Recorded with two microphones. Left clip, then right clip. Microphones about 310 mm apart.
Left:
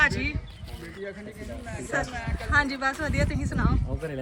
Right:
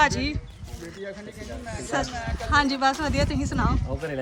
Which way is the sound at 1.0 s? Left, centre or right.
Right.